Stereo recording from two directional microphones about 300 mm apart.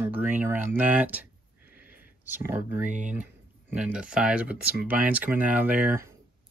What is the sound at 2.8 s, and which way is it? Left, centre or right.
Speech, right.